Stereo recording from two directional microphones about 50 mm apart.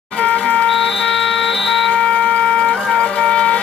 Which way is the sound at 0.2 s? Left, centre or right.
Left.